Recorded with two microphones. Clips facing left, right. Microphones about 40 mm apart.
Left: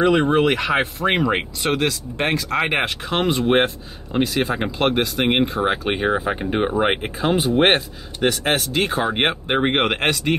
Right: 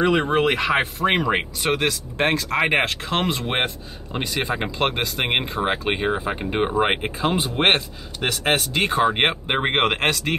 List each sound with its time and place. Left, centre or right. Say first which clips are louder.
0.0 s speech: left 2 dB; centre